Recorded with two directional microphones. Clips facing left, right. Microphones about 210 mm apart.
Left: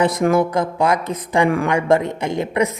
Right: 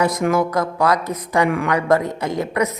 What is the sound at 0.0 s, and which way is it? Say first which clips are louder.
Speech: left 2 dB; 30° left (ahead or behind).